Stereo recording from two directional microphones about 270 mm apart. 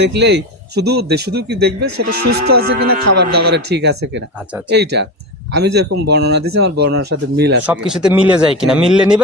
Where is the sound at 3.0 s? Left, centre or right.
Right.